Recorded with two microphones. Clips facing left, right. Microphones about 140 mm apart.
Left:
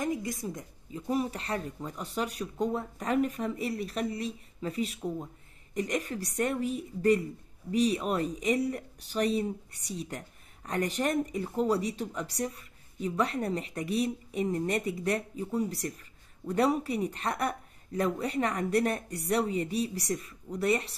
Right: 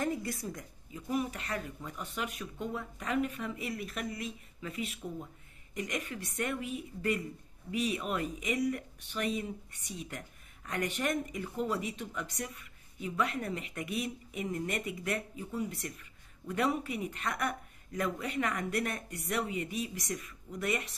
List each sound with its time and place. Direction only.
0.0 s a woman's voice: 15° left (ahead or behind)
1.0 s speech: 35° left (ahead or behind)